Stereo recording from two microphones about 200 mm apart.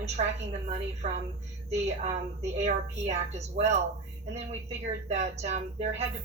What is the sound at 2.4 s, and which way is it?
A woman's voice, 35° right (ahead or behind).